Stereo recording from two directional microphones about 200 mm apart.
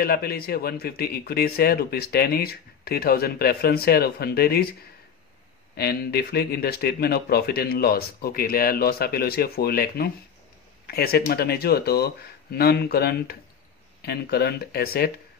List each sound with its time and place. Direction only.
0.0 s speech: 50° left (ahead or behind)
5.8 s speech: 50° left (ahead or behind)